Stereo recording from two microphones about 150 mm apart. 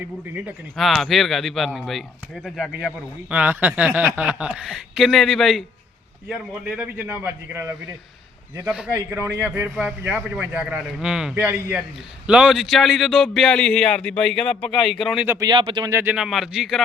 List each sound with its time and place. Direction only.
0.3 s a man's voice: centre (ahead or behind)
8.9 s a man's voice: 15° right (ahead or behind)
15.3 s speech: 20° right (ahead or behind)
15.5 s speech: 30° right (ahead or behind)
15.9 s a man's voice: 20° right (ahead or behind)
16.1 s a man's voice: centre (ahead or behind)